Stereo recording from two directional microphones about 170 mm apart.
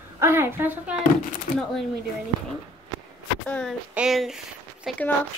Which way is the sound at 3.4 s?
5° left (ahead or behind).